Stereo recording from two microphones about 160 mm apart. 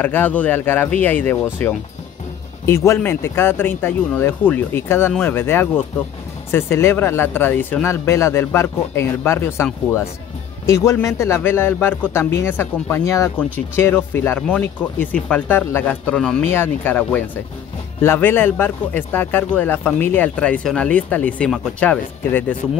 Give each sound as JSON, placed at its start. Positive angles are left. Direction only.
{"t": 0.0, "sound": "speech", "side_deg": 10}
{"t": 10.7, "sound": "speech", "side_deg": 20}